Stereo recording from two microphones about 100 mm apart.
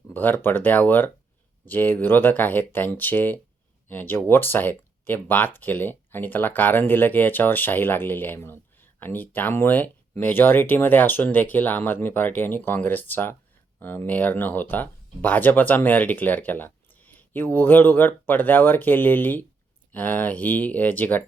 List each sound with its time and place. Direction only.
0.1 s speech: 20° left (ahead or behind)